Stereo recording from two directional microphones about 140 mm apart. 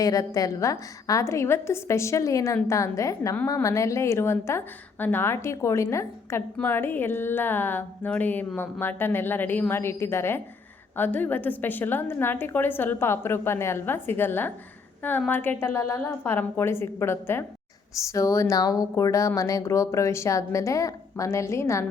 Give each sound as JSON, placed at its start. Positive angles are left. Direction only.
{"t": 0.0, "sound": "a woman's voice", "side_deg": 25}